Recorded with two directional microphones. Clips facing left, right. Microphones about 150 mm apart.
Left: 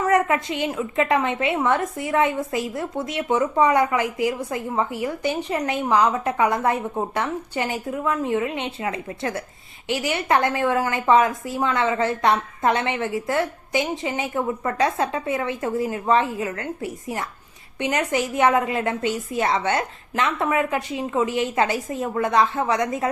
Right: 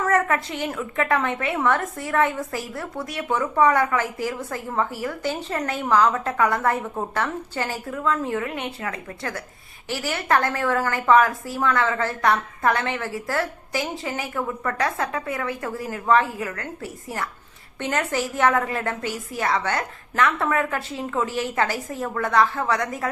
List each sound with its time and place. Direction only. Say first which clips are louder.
0.0 s a woman's voice: left 2 dB; 15° left (ahead or behind)